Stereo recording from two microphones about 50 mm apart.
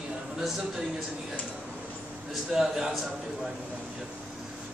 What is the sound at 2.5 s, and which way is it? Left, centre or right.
Speech, centre.